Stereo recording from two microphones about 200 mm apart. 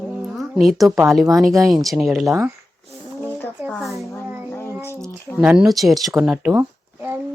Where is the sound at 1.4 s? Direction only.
Centre (ahead or behind).